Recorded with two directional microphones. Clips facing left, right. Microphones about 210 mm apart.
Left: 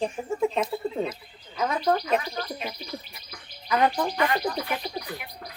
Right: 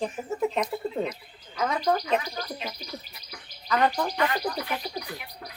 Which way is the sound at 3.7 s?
10° left (ahead or behind).